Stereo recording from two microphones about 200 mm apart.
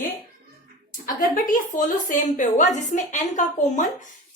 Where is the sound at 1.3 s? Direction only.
40° left (ahead or behind).